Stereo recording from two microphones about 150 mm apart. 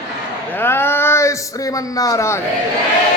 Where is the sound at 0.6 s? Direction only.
15° left (ahead or behind).